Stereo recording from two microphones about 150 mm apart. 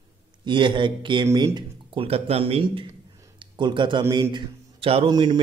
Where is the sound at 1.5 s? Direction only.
40° right (ahead or behind).